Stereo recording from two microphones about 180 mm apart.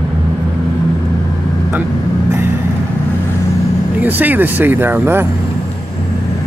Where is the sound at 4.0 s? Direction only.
10° right (ahead or behind).